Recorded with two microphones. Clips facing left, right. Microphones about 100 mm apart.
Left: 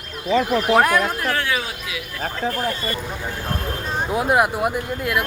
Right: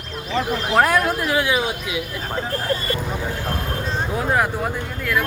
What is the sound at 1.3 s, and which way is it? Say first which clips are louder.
Speech: right 3 dB; 15° right (ahead or behind).